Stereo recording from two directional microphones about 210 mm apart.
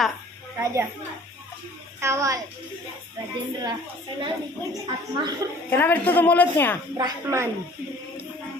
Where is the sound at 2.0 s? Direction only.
15° right (ahead or behind).